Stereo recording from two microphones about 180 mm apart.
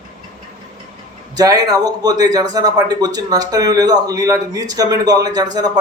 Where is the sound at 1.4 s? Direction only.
20° right (ahead or behind).